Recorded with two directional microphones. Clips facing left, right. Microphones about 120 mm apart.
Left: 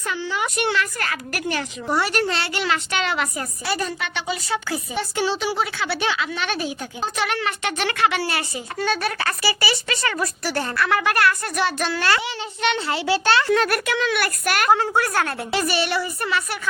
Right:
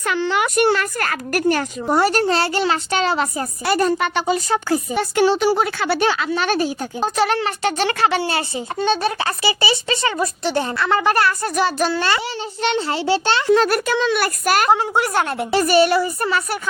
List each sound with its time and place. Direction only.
0.0 s a woman's voice: 75° right (ahead or behind)
0.5 s speech: 45° right (ahead or behind)
3.7 s a woman's voice: 50° right (ahead or behind)
14.7 s a child's voice: 20° right (ahead or behind)
15.5 s speech: 45° right (ahead or behind)